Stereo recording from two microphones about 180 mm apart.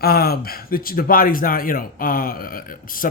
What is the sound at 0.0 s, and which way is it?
Speech, 55° left (ahead or behind).